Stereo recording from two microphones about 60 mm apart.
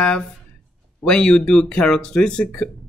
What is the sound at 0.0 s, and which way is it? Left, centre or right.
Speech, centre.